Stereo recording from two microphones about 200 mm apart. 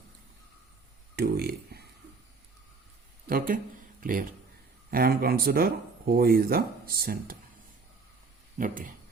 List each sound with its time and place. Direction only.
1.1 s speech: 50° right (ahead or behind)
3.2 s speech: 45° right (ahead or behind)
8.5 s speech: 45° right (ahead or behind)